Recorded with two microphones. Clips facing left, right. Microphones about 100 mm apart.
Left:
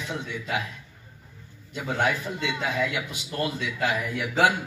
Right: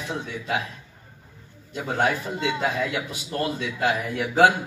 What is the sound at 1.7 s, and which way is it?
A man's voice, 35° right (ahead or behind).